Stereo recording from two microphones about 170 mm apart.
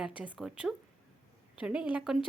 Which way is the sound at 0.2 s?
5° right (ahead or behind).